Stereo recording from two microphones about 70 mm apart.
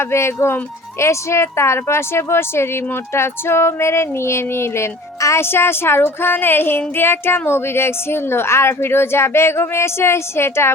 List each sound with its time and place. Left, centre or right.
0.0 s speech: left